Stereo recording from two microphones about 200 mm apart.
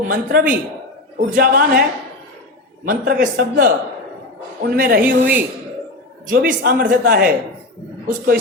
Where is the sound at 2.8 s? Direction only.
45° right (ahead or behind).